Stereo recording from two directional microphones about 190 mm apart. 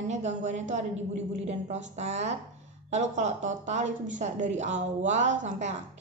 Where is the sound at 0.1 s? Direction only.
35° right (ahead or behind).